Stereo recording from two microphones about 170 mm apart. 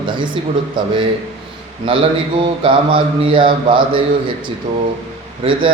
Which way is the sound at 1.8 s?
30° right (ahead or behind).